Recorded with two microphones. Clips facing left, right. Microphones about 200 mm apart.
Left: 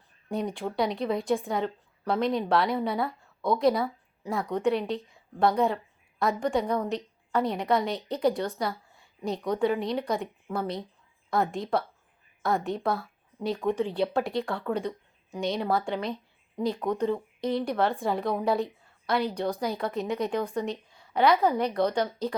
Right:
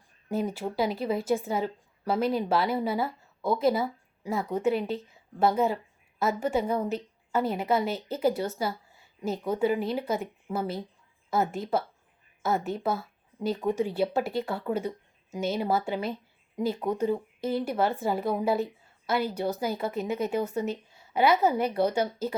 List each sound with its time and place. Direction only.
0.3 s a woman's voice: 5° right (ahead or behind)